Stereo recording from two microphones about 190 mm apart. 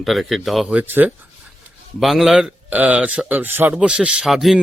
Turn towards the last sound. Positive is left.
turn(degrees=0)  # may be behind; listen again after turning